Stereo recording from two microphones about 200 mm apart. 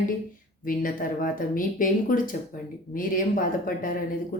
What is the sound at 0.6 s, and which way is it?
Speech, 45° left (ahead or behind).